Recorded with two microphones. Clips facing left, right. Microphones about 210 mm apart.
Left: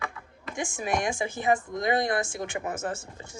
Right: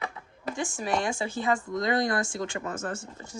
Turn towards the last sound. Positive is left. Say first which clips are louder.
# left 1 dB
turn(degrees=25)  # may be behind; listen again after turning